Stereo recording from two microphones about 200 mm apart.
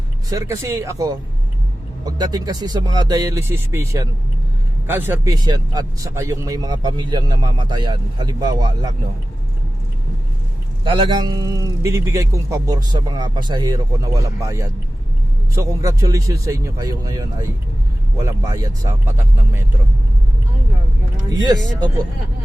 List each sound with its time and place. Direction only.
0.3 s speech: 15° right (ahead or behind)
10.8 s speech: 25° right (ahead or behind)
21.4 s speech: 20° right (ahead or behind)